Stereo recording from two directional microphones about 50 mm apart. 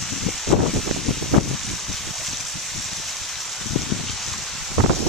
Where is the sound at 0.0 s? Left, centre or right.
Centre.